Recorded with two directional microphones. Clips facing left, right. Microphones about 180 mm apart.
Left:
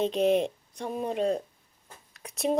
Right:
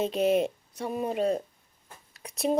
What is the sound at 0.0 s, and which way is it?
Speech, 5° right (ahead or behind).